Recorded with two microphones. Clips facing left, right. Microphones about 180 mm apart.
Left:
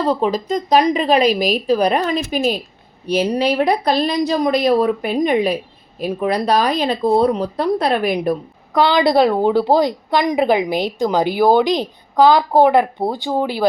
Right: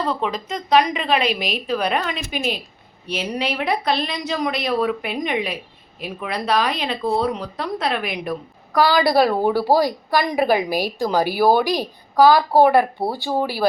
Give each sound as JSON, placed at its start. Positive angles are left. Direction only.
{"t": 0.0, "sound": "a woman's voice", "side_deg": 35}
{"t": 8.7, "sound": "a woman's voice", "side_deg": 20}